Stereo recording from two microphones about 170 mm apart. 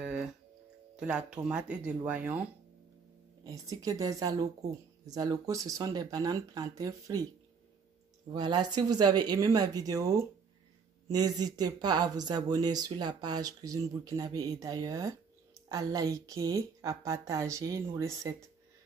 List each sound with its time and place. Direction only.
0.0 s tick-tock: 5° right (ahead or behind)
0.9 s speech: 5° right (ahead or behind)
3.4 s speech: 20° right (ahead or behind)
8.3 s speech: 25° right (ahead or behind)